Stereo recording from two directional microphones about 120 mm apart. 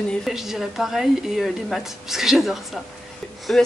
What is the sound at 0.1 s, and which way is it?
A woman's voice, centre (ahead or behind).